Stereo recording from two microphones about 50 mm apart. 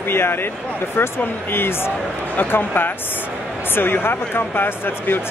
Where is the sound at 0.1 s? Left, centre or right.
Left.